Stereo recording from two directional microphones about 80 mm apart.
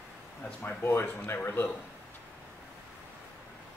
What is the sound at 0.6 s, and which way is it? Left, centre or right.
A man's voice, left.